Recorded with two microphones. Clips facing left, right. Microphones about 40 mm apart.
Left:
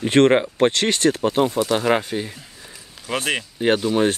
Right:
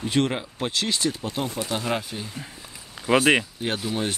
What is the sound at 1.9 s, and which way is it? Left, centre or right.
Speech, left.